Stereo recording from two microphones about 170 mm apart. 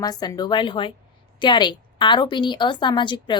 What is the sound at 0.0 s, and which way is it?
A woman's voice, 20° left (ahead or behind).